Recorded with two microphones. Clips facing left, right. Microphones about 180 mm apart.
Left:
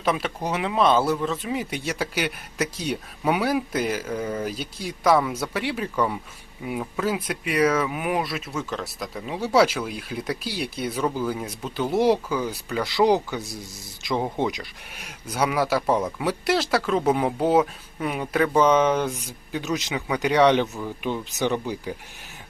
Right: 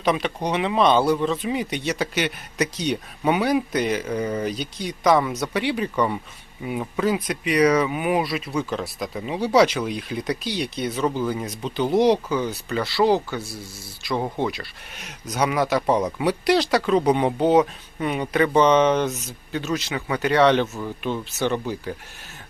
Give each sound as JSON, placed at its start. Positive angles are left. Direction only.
{"t": 0.0, "sound": "speech", "side_deg": 5}
{"t": 14.9, "sound": "speech", "side_deg": 5}